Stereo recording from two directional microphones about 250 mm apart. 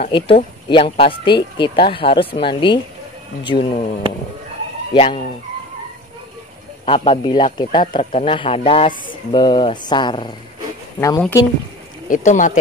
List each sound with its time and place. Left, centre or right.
0.0 s speech: left
4.9 s speech: left
6.9 s speech: centre
12.1 s speech: left